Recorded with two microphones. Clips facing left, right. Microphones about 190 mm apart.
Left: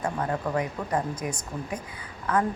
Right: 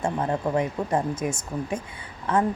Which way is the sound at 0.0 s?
25° right (ahead or behind).